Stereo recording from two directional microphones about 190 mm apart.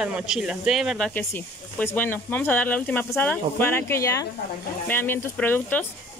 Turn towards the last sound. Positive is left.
turn(degrees=10)  # may be behind; listen again after turning